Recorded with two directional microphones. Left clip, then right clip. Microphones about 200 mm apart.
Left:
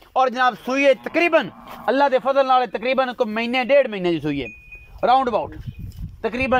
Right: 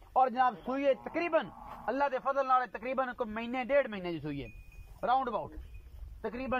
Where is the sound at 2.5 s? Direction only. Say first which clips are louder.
Left 12 dB; 25° left (ahead or behind).